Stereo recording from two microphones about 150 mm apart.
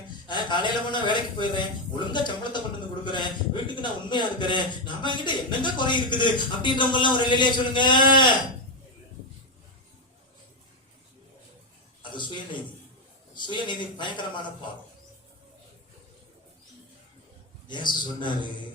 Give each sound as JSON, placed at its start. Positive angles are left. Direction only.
{"t": 0.3, "sound": "a man's voice", "side_deg": 30}
{"t": 12.1, "sound": "a sound", "side_deg": 30}
{"t": 13.3, "sound": "a man's voice", "side_deg": 30}
{"t": 17.7, "sound": "a man's voice", "side_deg": 30}